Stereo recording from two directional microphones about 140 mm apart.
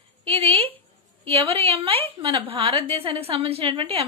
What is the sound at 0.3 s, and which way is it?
A woman's voice, 45° right (ahead or behind).